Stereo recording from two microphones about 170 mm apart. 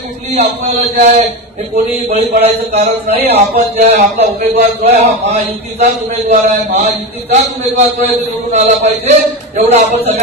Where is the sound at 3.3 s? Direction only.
40° right (ahead or behind).